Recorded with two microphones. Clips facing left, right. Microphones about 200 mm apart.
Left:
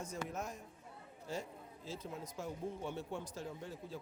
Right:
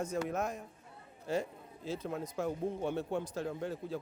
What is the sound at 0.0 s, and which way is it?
A man's voice, 60° right (ahead or behind).